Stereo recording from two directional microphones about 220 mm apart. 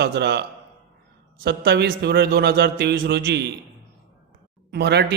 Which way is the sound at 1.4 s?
45° right (ahead or behind).